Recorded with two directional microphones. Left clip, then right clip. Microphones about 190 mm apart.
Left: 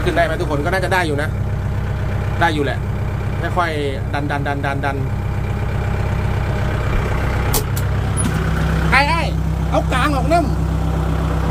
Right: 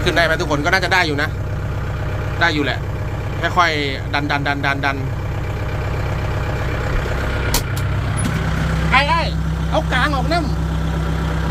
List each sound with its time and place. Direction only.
0.0 s speech: 5° left (ahead or behind)
2.4 s speech: 15° left (ahead or behind)
8.9 s vehicle: 45° left (ahead or behind)
9.7 s speech: 45° left (ahead or behind)